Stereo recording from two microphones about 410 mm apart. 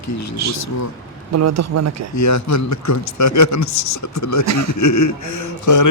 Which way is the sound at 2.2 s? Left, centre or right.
Left.